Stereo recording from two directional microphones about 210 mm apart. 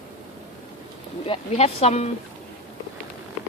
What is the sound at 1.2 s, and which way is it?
Speech, 30° left (ahead or behind).